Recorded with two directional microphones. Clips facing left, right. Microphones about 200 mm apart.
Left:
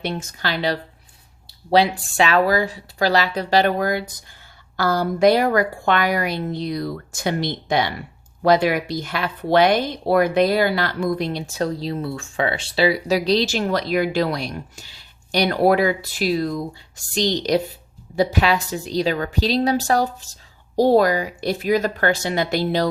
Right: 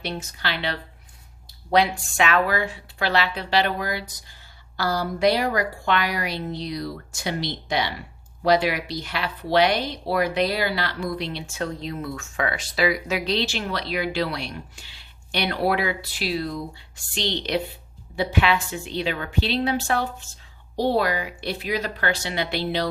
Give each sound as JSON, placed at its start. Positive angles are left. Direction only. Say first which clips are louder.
{"t": 0.0, "sound": "speech", "louder": "left 4 dB", "side_deg": 45}
{"t": 1.5, "sound": "a sound", "louder": "left 3 dB", "side_deg": 30}
{"t": 2.1, "sound": "a woman's voice", "louder": "left 4 dB", "side_deg": 35}